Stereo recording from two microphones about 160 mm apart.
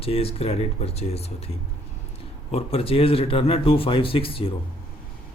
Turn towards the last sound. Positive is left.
turn(degrees=35)  # may be behind; listen again after turning